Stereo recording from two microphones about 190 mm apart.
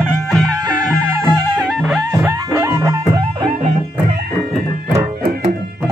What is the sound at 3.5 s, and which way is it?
Music, 35° right (ahead or behind).